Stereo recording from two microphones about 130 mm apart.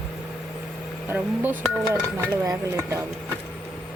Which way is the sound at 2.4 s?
25° right (ahead or behind).